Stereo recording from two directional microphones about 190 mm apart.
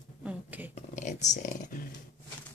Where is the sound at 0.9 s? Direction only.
40° left (ahead or behind).